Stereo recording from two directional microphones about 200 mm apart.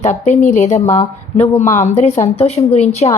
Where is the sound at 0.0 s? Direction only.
35° left (ahead or behind).